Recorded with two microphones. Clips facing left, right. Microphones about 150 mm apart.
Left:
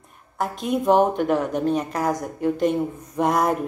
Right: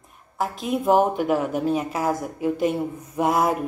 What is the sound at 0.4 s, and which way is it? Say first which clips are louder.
A woman's voice: left 1 dB; centre (ahead or behind).